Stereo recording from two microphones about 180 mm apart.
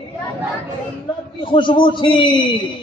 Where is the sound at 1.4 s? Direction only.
30° left (ahead or behind).